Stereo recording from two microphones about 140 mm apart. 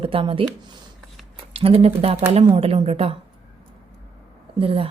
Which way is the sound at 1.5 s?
45° right (ahead or behind).